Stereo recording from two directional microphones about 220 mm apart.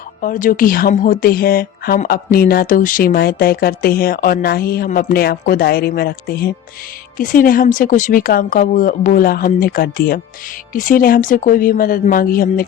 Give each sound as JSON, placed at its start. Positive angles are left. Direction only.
{"t": 0.2, "sound": "speech", "side_deg": 40}